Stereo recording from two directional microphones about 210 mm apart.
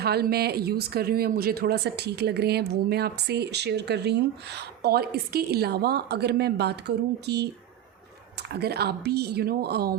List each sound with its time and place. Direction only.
0.0 s speech: 50° right (ahead or behind)